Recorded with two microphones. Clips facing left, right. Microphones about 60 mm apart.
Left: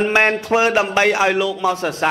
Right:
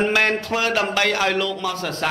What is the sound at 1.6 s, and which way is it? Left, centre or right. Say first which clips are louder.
Speech: left 6 dB; left.